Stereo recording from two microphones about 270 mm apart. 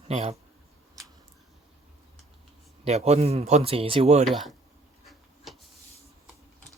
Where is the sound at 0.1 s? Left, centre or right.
Right.